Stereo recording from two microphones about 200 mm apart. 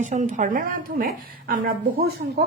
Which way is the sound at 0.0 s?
35° right (ahead or behind).